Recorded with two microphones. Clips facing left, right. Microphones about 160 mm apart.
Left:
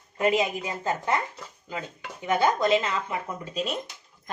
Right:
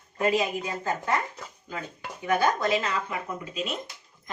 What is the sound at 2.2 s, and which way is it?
Speech, 20° left (ahead or behind).